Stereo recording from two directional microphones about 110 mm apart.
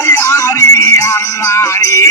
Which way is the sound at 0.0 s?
25° left (ahead or behind).